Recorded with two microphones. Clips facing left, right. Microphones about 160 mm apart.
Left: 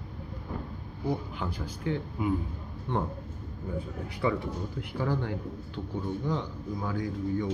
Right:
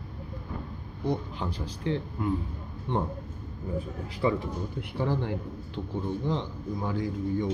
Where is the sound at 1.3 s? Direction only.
30° right (ahead or behind).